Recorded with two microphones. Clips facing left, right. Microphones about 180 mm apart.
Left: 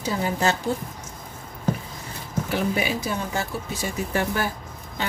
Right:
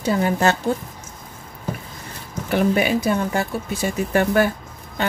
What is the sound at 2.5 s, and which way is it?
Speech, 60° right (ahead or behind).